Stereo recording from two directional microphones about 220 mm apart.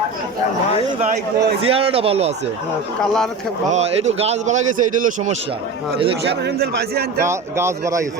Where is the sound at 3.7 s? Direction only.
30° right (ahead or behind).